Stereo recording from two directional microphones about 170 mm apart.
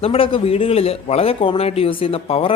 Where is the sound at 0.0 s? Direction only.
35° left (ahead or behind).